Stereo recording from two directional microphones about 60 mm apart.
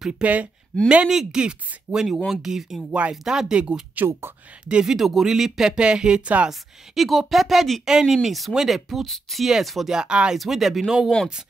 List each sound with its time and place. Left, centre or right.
0.2 s speech: right
4.9 s speech: centre
7.0 s speech: centre
9.9 s speech: centre
10.3 s speech: centre